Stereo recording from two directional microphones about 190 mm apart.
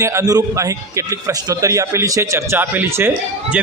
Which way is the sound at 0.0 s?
15° right (ahead or behind).